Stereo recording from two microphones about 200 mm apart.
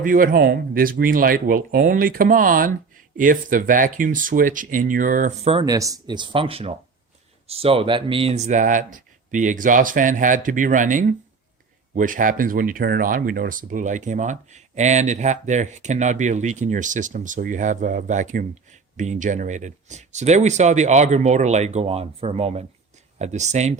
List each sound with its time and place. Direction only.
0.0 s speech: 45° right (ahead or behind)
5.6 s speech: 15° right (ahead or behind); by 23.7 s 35° right (ahead or behind)